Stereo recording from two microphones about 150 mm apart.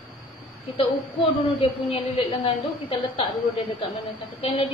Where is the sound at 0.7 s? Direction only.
40° left (ahead or behind).